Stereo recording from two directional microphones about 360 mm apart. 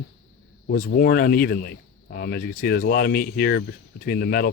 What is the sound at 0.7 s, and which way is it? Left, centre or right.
Speech, left.